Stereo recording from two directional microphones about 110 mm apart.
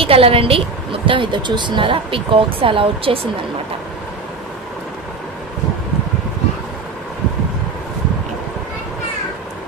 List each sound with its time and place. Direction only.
0.0 s speech: 60° right (ahead or behind)